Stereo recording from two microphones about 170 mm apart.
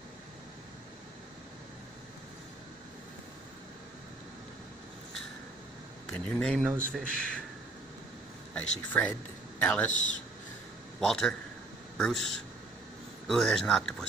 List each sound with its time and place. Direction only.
6.1 s speech: 5° left (ahead or behind)
6.6 s speech: 10° right (ahead or behind)
6.9 s speech: 5° left (ahead or behind)
8.5 s speech: 10° left (ahead or behind)
11.0 s speech: centre (ahead or behind)
13.3 s speech: centre (ahead or behind)